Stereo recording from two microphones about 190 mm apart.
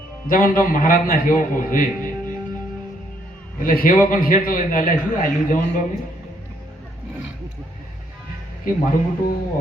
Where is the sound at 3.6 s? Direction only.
50° left (ahead or behind).